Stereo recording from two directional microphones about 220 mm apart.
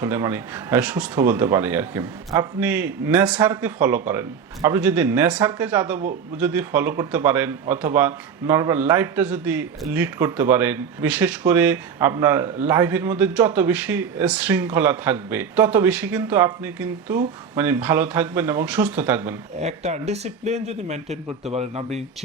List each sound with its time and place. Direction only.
0.0 s a man's voice: 10° right (ahead or behind)
19.5 s speech: 30° right (ahead or behind)